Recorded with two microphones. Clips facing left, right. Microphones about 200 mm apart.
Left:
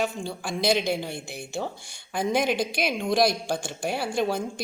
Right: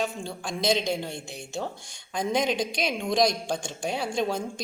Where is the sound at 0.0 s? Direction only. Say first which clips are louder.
Left 2 dB; centre (ahead or behind).